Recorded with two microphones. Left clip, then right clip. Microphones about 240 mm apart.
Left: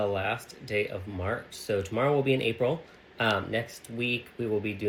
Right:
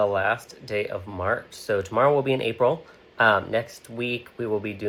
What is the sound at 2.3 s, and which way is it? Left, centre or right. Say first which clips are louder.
Speech: right 2 dB; right.